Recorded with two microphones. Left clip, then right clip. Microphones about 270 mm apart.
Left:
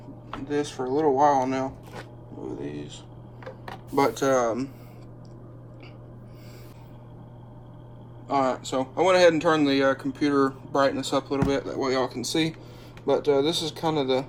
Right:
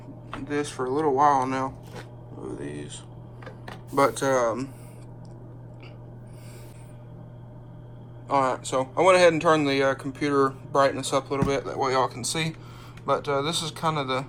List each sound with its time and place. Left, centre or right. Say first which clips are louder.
0.8 s speech: even; centre
8.3 s speech: right 1 dB; centre